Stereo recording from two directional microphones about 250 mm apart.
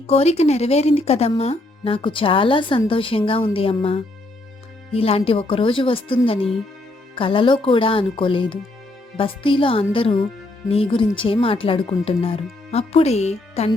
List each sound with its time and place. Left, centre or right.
0.1 s speech: left